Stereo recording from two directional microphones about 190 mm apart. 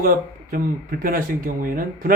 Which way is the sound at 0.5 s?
50° right (ahead or behind).